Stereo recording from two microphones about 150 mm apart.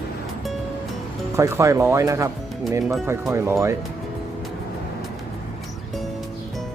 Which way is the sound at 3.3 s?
20° right (ahead or behind).